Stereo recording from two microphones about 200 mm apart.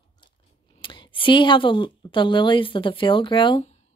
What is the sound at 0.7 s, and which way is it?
A woman's voice, 25° left (ahead or behind).